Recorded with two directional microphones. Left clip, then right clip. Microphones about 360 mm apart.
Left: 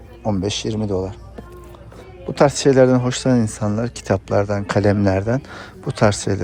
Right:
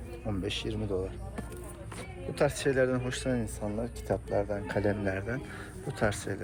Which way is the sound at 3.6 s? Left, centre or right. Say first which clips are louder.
Left 12 dB; left.